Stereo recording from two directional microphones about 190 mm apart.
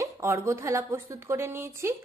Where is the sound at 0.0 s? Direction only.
15° right (ahead or behind).